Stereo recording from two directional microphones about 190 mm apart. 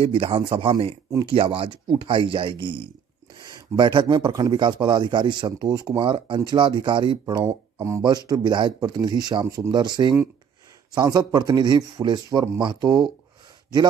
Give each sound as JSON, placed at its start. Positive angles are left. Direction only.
{"t": 0.0, "sound": "a man's voice", "side_deg": -30}